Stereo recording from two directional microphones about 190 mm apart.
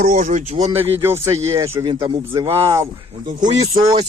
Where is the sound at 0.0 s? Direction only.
45° right (ahead or behind).